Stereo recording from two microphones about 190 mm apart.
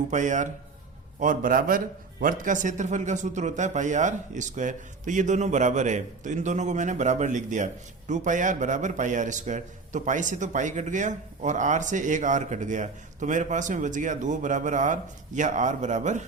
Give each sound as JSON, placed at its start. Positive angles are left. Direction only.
{"t": 0.1, "sound": "a man's voice", "side_deg": -40}